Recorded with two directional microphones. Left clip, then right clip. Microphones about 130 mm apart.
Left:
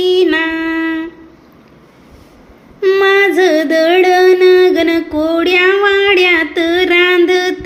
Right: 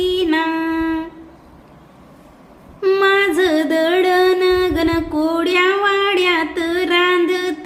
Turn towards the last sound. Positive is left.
turn(degrees=30)  # may be behind; listen again after turning